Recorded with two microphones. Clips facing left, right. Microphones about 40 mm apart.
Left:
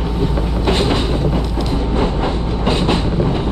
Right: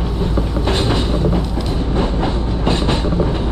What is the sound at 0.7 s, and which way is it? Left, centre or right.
Vehicle, centre.